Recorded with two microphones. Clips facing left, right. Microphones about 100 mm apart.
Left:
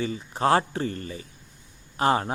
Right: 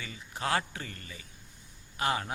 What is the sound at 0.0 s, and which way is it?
Speech, 35° left (ahead or behind).